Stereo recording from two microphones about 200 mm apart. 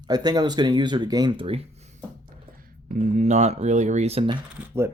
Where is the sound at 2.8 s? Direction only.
40° right (ahead or behind).